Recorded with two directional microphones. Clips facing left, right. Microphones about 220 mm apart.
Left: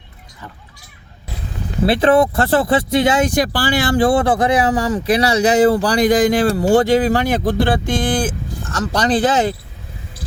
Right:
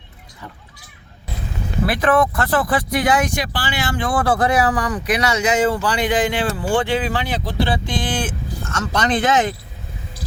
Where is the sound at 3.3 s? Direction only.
40° left (ahead or behind).